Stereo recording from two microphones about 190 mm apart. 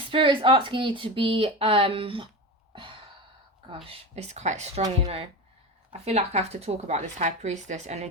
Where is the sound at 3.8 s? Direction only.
35° right (ahead or behind).